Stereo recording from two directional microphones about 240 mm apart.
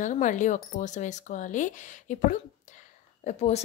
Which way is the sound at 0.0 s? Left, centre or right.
Left.